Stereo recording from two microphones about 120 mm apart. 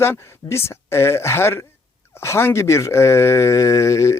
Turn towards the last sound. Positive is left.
turn(degrees=25)  # may be behind; listen again after turning